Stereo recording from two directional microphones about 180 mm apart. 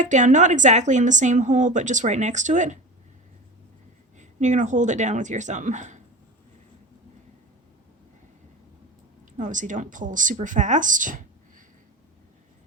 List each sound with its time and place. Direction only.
0.0 s speech: 45° right (ahead or behind)
4.2 s speech: 40° right (ahead or behind)
9.4 s speech: 45° right (ahead or behind)